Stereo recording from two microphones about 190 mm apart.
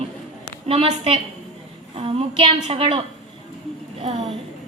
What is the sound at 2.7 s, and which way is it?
Speech, 30° right (ahead or behind).